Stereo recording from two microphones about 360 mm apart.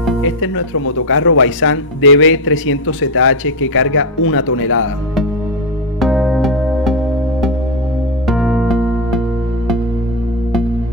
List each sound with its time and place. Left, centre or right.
0.2 s speech: left
5.9 s music: centre
8.3 s music: centre